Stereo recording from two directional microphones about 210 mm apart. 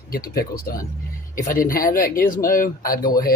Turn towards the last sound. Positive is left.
turn(degrees=45)  # may be behind; listen again after turning